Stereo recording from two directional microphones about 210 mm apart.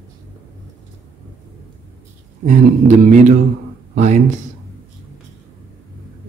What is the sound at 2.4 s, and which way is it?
Speech, 35° right (ahead or behind).